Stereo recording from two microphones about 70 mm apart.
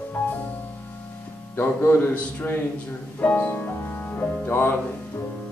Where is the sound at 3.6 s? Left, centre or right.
Left.